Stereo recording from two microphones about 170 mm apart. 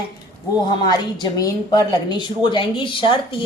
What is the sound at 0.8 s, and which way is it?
A woman's voice, 25° left (ahead or behind).